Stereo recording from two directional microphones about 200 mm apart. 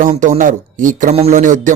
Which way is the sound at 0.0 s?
40° right (ahead or behind).